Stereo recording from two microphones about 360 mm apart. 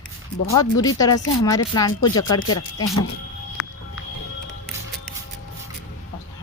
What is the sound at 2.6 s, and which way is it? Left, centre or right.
Speech, left.